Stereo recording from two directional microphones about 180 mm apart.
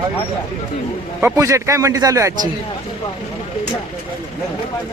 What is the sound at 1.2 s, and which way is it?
A man's voice, 15° right (ahead or behind).